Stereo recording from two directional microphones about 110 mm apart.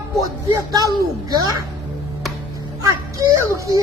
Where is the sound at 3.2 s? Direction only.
30° right (ahead or behind).